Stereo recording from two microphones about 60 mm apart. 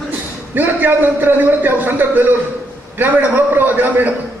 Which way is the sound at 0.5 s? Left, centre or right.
Right.